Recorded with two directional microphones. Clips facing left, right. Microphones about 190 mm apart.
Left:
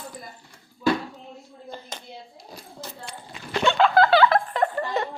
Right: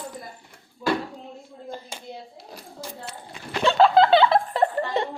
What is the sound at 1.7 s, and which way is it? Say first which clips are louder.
Clapping: even; 10° right (ahead or behind).